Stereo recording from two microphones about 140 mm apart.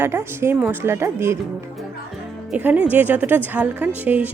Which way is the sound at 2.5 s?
10° right (ahead or behind).